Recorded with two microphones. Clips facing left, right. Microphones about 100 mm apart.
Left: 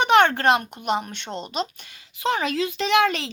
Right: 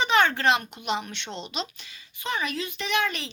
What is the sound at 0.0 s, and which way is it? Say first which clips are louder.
A child's voice: left 5 dB; 60° left (ahead or behind).